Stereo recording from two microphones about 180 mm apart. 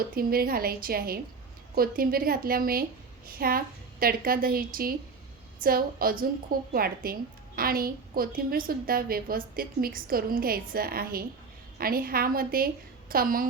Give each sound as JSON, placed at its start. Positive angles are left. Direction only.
{"t": 0.0, "sound": "a woman's voice", "side_deg": -55}